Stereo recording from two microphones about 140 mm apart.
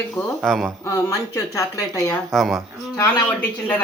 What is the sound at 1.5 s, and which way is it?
Speech, 25° left (ahead or behind).